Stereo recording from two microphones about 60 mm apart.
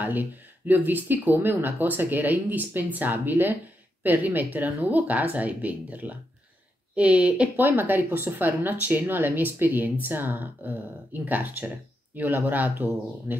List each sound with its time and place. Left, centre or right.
0.0 s speech: right